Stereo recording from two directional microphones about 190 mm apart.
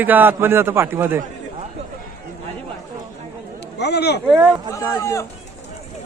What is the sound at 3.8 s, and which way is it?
Speech, 60° left (ahead or behind).